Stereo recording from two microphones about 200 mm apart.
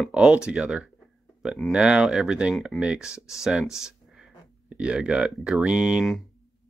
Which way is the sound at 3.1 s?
15° left (ahead or behind).